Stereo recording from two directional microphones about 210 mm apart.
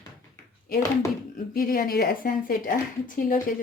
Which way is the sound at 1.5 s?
45° left (ahead or behind).